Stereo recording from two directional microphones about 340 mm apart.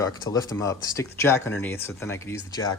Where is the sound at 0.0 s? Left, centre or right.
Centre.